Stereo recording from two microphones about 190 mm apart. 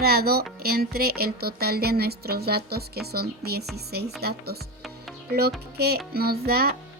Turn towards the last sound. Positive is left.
turn(degrees=-55)  # may be behind; listen again after turning